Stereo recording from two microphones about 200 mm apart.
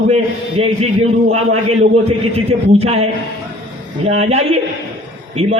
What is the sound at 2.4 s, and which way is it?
Speech, 30° right (ahead or behind).